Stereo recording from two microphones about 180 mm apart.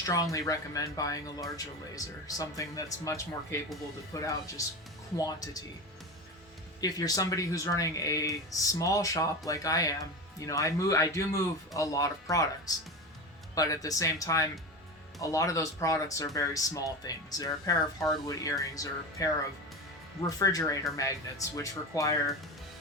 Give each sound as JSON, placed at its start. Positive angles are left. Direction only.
{"t": 0.0, "sound": "speech", "side_deg": 20}
{"t": 6.8, "sound": "speech", "side_deg": 20}